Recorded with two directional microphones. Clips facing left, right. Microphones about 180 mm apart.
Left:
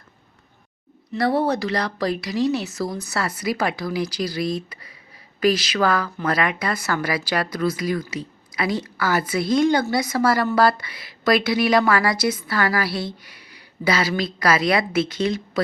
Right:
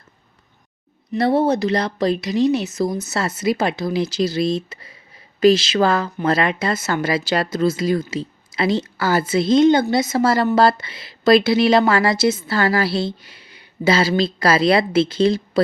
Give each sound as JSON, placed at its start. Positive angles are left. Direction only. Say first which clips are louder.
{"t": 1.1, "sound": "a woman's voice", "louder": "right 4 dB", "side_deg": -25}